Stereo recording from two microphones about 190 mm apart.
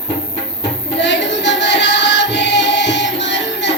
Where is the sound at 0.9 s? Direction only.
70° left (ahead or behind).